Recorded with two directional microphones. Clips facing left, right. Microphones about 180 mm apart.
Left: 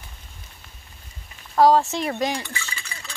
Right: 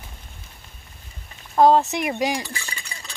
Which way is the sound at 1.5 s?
20° right (ahead or behind).